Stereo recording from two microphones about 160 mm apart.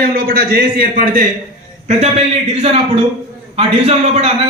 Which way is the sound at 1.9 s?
40° right (ahead or behind).